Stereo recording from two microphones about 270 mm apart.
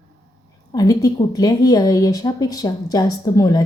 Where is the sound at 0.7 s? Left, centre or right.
Centre.